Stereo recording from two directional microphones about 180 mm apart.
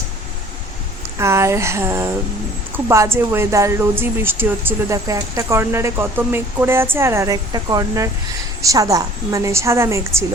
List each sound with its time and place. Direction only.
1.2 s speech: 15° right (ahead or behind)